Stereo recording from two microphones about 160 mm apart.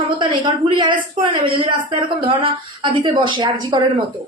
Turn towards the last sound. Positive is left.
turn(degrees=-30)  # may be behind; listen again after turning